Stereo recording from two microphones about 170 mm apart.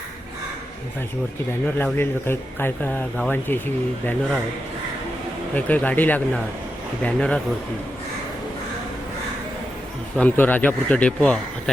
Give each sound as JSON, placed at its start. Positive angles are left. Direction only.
{"t": 1.6, "sound": "speech", "side_deg": 10}
{"t": 5.5, "sound": "speech", "side_deg": 10}
{"t": 10.2, "sound": "speech", "side_deg": 10}